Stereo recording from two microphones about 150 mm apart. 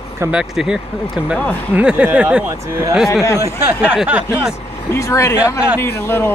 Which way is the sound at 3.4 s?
15° right (ahead or behind).